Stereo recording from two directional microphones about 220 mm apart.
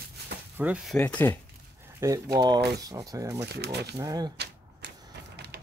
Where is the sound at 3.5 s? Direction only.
50° right (ahead or behind).